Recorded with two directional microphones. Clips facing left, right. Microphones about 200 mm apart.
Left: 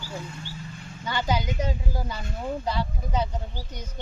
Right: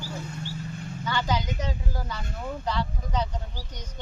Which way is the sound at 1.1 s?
15° left (ahead or behind).